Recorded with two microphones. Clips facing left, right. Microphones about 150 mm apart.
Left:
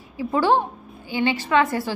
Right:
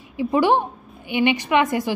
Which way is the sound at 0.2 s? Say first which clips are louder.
Right 2 dB; 15° right (ahead or behind).